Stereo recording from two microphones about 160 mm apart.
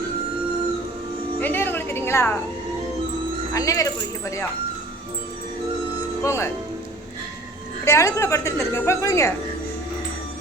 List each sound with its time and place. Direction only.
1.4 s music: 10° left (ahead or behind)
3.5 s a woman's voice: 20° left (ahead or behind)
6.2 s speech: 15° left (ahead or behind)
7.9 s a woman's voice: 20° left (ahead or behind)